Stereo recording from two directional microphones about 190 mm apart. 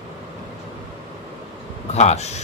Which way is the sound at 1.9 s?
35° left (ahead or behind).